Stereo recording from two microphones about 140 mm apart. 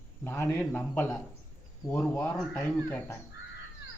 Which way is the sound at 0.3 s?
15° left (ahead or behind).